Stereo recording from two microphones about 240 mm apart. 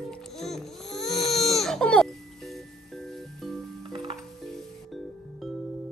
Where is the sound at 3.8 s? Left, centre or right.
Right.